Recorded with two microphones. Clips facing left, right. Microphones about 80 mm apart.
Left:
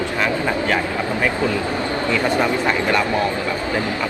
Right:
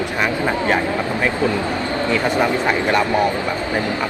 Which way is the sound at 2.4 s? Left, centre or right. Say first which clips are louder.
Right 1 dB; centre.